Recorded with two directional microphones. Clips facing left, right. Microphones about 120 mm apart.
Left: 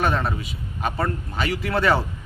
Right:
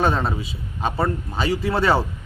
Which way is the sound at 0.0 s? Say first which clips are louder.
Right 2 dB; 30° right (ahead or behind).